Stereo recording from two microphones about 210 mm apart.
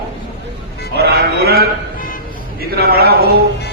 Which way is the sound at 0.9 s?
50° right (ahead or behind).